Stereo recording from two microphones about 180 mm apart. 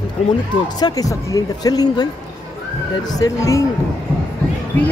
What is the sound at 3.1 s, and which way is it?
Speech, 20° left (ahead or behind).